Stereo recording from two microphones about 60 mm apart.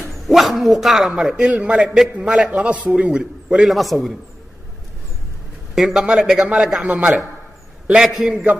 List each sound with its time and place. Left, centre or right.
0.0 s a man's voice: centre
3.6 s a man's voice: centre
5.8 s a man's voice: centre
6.8 s a man's voice: right